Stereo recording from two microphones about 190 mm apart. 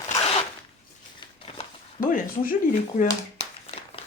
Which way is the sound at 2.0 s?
45° left (ahead or behind).